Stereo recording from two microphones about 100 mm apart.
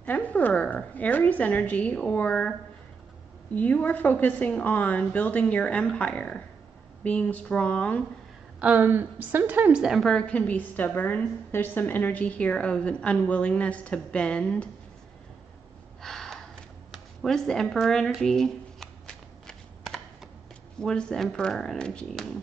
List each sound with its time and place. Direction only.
0.0 s a woman's voice: 15° left (ahead or behind)
3.5 s a woman's voice: 15° left (ahead or behind)
8.5 s a woman's voice: 15° right (ahead or behind)
10.0 s a woman's voice: 10° left (ahead or behind)
16.0 s gasp: 5° left (ahead or behind)
16.9 s a sound: centre (ahead or behind)
20.8 s a woman's voice: 10° left (ahead or behind)